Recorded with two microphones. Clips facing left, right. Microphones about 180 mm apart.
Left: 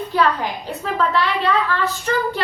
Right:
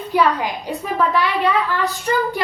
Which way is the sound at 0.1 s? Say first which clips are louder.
Right 2 dB; 15° right (ahead or behind).